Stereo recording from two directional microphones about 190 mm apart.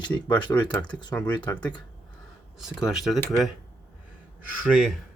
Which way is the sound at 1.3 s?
25° left (ahead or behind).